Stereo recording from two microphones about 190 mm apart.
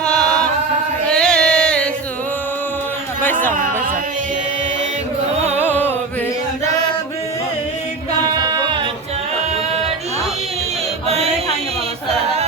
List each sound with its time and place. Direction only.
0.0 s chant: 5° left (ahead or behind)
1.0 s music: 5° left (ahead or behind)
5.5 s music: 10° left (ahead or behind)
8.4 s a sound: 20° right (ahead or behind)